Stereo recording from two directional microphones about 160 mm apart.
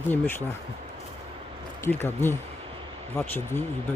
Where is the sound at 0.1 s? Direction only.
15° left (ahead or behind).